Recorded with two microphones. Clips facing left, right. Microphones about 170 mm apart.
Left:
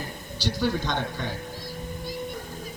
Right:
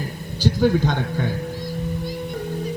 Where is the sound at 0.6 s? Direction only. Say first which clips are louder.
Right 7 dB; 45° right (ahead or behind).